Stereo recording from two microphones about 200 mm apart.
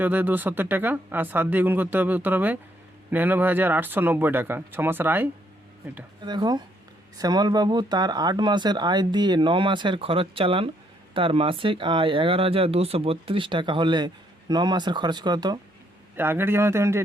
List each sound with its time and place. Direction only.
0.0 s speech: 10° right (ahead or behind)
6.2 s speech: 20° right (ahead or behind)